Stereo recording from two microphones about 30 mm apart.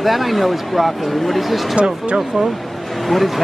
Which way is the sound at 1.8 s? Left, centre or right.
Right.